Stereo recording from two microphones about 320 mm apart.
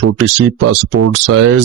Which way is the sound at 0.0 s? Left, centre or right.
Right.